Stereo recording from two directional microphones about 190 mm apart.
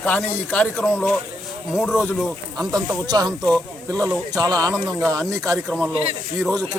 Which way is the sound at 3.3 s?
5° left (ahead or behind).